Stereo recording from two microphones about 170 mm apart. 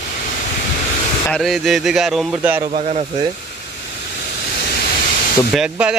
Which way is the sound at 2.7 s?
40° right (ahead or behind).